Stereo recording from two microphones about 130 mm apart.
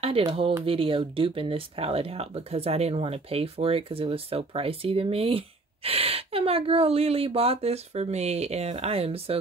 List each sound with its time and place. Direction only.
0.0 s speech: 45° right (ahead or behind)